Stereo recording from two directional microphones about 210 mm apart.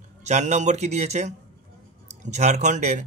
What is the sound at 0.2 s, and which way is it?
A man's voice, 35° right (ahead or behind).